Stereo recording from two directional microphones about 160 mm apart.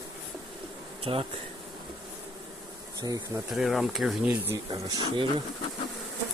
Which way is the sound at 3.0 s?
20° right (ahead or behind).